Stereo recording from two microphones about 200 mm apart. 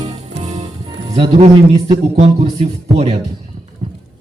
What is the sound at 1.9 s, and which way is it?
Speech, 35° right (ahead or behind).